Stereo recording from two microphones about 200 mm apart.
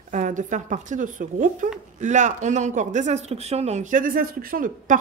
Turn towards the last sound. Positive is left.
turn(degrees=-45)  # may be behind; listen again after turning